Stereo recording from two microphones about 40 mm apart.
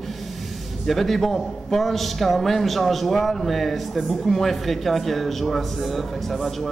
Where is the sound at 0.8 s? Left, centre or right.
Centre.